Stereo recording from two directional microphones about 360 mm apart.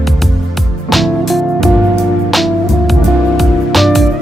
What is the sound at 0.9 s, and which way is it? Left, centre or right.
Music, centre.